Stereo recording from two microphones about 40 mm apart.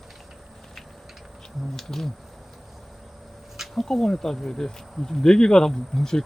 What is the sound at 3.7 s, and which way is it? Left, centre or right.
Speech, centre.